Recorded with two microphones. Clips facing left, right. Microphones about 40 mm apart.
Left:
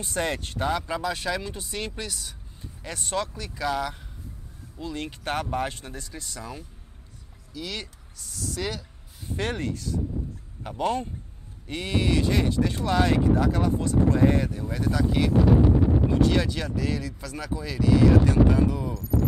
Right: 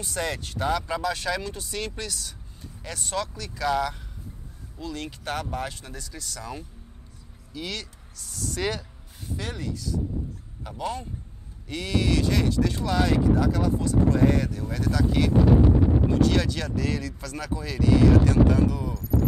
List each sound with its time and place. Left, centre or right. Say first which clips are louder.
0.0 s speech: left 2 dB; left
0.8 s speech: right 1 dB; centre
3.6 s speech: right 2 dB; centre
4.7 s speech: left 1 dB; left
7.5 s speech: right 1 dB; centre
8.2 s speech: right 1 dB; centre
8.5 s speech: right 3 dB; centre
9.4 s speech: left 5 dB; left; by 18.0 s centre
18.3 s speech: even; centre
18.9 s speech: even; centre